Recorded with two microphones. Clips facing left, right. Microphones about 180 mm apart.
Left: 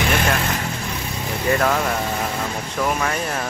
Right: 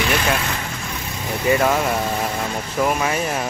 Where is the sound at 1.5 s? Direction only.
10° right (ahead or behind).